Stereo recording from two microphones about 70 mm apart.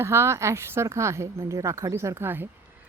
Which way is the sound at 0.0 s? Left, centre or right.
Right.